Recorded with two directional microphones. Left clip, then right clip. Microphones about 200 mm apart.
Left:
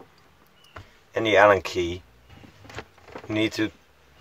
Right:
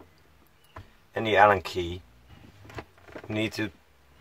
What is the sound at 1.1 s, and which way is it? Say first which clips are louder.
Speech: left 3 dB; 10° left (ahead or behind).